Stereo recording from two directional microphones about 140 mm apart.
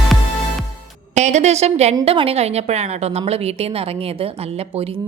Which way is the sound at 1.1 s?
55° right (ahead or behind).